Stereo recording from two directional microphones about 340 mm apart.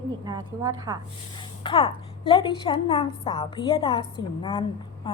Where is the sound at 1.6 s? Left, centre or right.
Centre.